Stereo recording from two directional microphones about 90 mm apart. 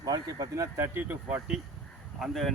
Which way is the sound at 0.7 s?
25° right (ahead or behind).